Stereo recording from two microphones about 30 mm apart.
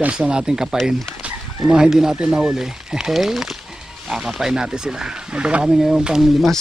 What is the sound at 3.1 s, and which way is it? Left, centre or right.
Speech, centre.